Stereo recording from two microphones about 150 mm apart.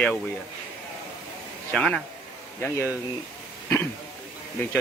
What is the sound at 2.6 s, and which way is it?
Speech, 15° left (ahead or behind).